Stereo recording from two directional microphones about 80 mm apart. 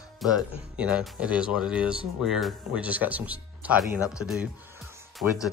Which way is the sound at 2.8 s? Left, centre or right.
Centre.